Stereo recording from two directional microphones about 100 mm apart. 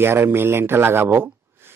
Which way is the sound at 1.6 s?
25° right (ahead or behind).